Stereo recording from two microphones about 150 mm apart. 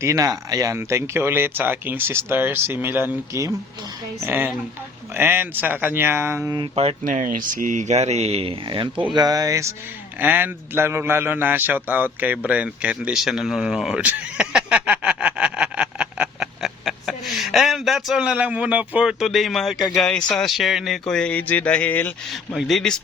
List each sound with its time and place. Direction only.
0.0 s speech: 20° right (ahead or behind)
6.6 s speech: 45° right (ahead or behind)
7.0 s a man's voice: 65° right (ahead or behind); by 22.1 s 10° left (ahead or behind)
22.3 s speech: centre (ahead or behind)